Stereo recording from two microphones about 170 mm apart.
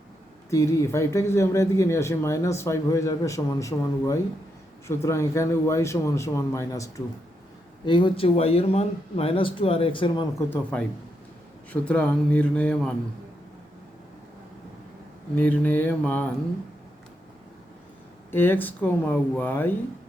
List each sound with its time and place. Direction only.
0.5 s speech: 15° left (ahead or behind)
7.9 s speech: 30° left (ahead or behind)
10.3 s speech: 10° left (ahead or behind)
15.4 s speech: 10° left (ahead or behind)
18.3 s speech: 10° left (ahead or behind)